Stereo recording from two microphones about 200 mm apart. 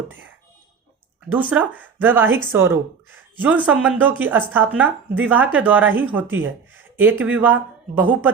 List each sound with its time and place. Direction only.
1.3 s speech: 10° right (ahead or behind)